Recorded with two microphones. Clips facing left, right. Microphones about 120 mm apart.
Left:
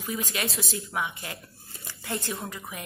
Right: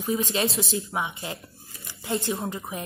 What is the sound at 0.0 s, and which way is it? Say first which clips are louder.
A woman's voice: right 6 dB; 25° right (ahead or behind).